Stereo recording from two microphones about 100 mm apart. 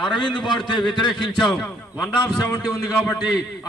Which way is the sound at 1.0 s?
5° left (ahead or behind).